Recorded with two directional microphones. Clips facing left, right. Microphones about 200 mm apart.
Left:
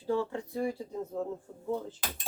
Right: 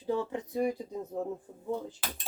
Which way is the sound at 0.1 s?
20° right (ahead or behind).